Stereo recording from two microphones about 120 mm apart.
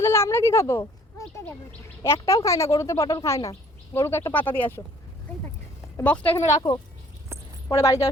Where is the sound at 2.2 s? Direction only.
25° left (ahead or behind).